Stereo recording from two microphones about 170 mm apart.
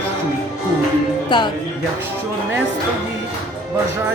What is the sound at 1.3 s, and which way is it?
Speech, 25° left (ahead or behind).